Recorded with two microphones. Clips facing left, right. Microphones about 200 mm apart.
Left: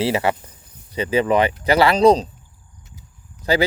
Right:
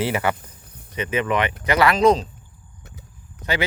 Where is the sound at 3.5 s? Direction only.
35° left (ahead or behind).